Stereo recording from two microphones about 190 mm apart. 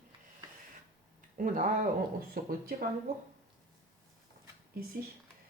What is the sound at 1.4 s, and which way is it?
Speech, 45° right (ahead or behind).